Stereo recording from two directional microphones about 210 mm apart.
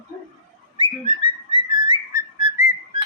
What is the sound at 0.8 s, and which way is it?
Whistling, 25° right (ahead or behind).